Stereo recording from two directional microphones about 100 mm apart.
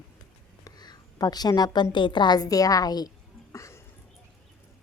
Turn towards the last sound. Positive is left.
turn(degrees=30)  # may be behind; listen again after turning